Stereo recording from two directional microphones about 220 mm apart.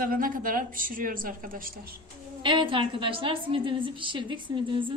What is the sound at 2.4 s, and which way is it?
A woman's voice, 20° right (ahead or behind).